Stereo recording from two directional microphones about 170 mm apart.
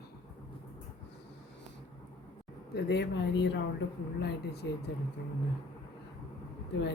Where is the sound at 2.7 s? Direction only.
80° left.